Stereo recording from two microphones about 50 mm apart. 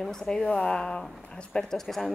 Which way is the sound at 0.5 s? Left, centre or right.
Left.